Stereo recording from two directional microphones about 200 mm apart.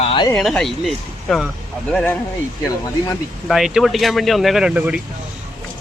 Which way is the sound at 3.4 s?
Centre (ahead or behind).